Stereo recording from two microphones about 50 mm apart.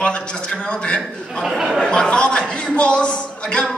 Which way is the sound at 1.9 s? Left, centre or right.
Centre.